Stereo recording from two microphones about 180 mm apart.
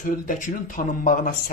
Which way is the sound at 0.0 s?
45° left (ahead or behind).